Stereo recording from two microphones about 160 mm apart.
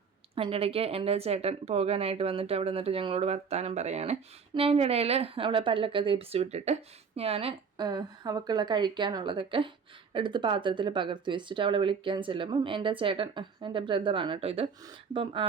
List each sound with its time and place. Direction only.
0.3 s a woman's voice: 35° right (ahead or behind)